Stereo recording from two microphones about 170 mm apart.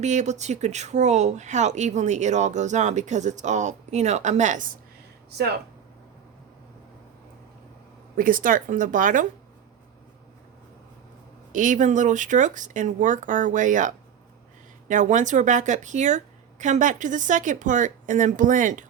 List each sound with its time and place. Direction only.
0.0 s speech: 45° right (ahead or behind)
8.1 s speech: 55° right (ahead or behind)
11.5 s speech: 50° right (ahead or behind)